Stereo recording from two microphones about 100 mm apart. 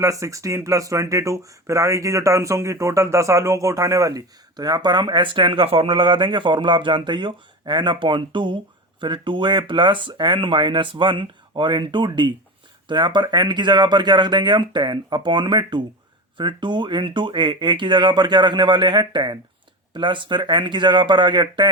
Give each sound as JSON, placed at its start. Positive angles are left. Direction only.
{"t": 0.0, "sound": "speech", "side_deg": -30}